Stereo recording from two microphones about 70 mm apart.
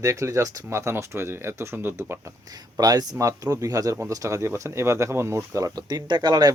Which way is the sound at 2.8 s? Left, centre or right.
Right.